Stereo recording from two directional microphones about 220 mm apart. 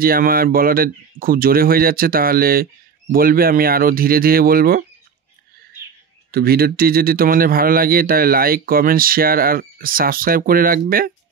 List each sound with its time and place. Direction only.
0.0 s speech: 40° right (ahead or behind)
6.3 s speech: 45° right (ahead or behind)